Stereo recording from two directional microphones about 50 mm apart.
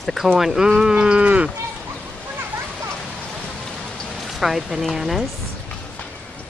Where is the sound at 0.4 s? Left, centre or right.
Centre; by 1.5 s right.